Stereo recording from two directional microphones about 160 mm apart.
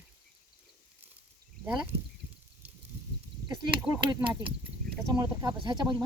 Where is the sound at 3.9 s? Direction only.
20° right (ahead or behind).